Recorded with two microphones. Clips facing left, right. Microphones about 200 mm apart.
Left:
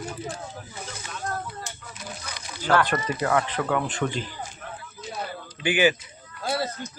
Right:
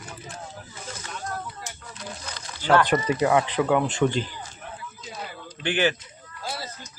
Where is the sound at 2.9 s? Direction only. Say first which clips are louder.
Right 3 dB; 15° right (ahead or behind).